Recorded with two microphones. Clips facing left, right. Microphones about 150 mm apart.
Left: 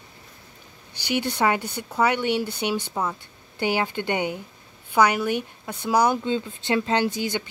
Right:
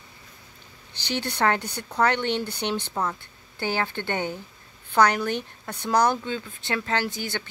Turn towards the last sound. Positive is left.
turn(degrees=15)  # may be behind; listen again after turning